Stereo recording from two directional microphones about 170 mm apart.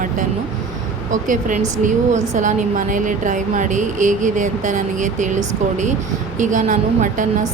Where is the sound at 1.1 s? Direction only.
50° right (ahead or behind).